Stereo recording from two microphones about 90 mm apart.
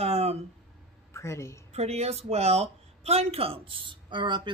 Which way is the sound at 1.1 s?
30° left (ahead or behind).